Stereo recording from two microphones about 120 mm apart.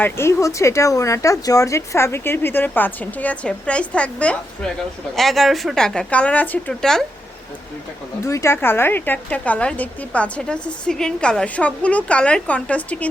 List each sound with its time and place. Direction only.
0.0 s a woman's voice: 20° left (ahead or behind)
8.2 s a woman's voice: 25° left (ahead or behind)